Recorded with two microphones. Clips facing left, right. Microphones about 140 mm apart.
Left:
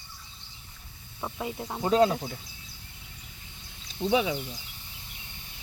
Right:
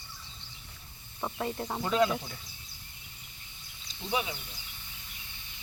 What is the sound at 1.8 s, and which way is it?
Speech, 35° left (ahead or behind).